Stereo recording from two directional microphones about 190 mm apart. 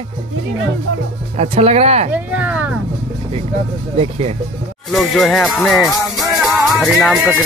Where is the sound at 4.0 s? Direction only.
30° right (ahead or behind).